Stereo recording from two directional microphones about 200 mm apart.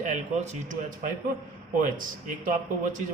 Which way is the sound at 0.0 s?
35° right (ahead or behind).